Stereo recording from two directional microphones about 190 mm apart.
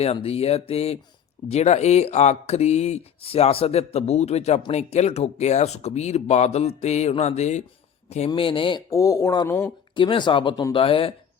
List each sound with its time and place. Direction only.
0.0 s speech: 30° left (ahead or behind); by 9.7 s 15° left (ahead or behind)
9.9 s speech: 25° left (ahead or behind)